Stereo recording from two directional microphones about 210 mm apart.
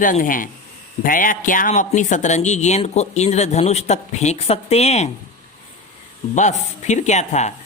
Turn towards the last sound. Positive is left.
turn(degrees=35)  # may be behind; listen again after turning